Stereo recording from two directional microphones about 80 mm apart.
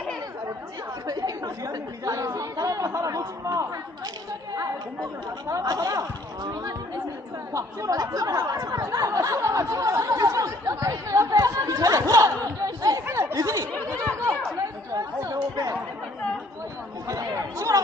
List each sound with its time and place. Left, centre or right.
1.0 s chatter: right
5.5 s speech: right
13.1 s chatter: right
14.9 s chatter: right
17.1 s chatter: right